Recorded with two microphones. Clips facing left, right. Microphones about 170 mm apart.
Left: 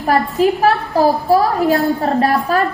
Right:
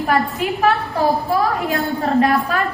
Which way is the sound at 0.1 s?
35° left (ahead or behind).